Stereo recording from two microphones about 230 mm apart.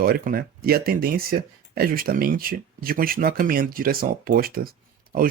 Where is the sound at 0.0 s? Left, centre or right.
Right.